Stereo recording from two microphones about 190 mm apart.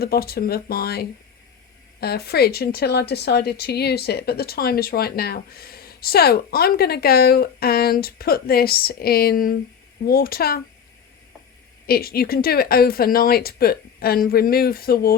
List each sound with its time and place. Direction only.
0.0 s speech: 55° left (ahead or behind)
11.9 s speech: 55° left (ahead or behind)